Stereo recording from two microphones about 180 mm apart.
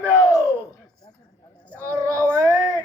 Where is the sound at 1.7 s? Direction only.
15° right (ahead or behind).